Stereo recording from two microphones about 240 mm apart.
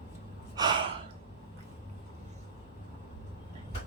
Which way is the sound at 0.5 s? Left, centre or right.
Centre.